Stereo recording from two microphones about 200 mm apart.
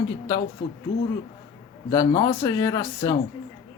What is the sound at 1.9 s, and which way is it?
Speech, 20° left (ahead or behind).